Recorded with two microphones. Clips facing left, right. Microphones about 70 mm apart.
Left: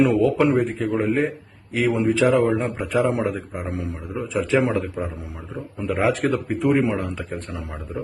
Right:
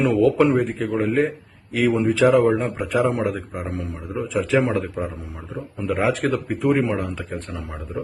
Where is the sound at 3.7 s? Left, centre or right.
Left.